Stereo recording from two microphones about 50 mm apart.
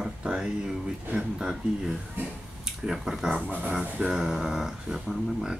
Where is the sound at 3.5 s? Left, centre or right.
Right.